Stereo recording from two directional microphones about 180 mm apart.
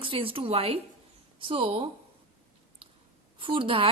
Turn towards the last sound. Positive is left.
turn(degrees=-30)  # may be behind; listen again after turning